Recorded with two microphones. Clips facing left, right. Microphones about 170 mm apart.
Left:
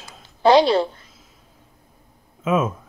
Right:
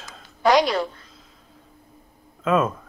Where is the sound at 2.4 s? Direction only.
5° left (ahead or behind).